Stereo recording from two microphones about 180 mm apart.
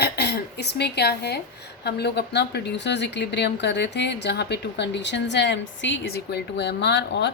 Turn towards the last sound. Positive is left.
turn(degrees=70)  # may be behind; listen again after turning